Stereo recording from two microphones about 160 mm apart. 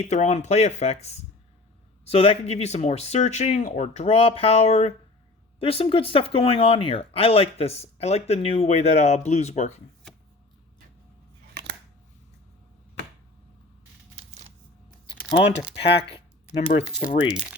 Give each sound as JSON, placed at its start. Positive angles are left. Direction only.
{"t": 0.0, "sound": "speech", "side_deg": 45}
{"t": 11.5, "sound": "scissors", "side_deg": -90}
{"t": 14.2, "sound": "a sound", "side_deg": -45}
{"t": 15.8, "sound": "speech", "side_deg": 35}